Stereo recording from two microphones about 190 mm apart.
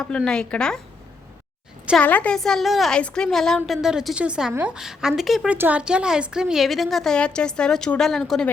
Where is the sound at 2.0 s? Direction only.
5° left (ahead or behind).